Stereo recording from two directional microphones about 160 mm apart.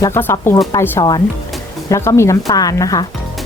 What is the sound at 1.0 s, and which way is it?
Speech, 25° left (ahead or behind).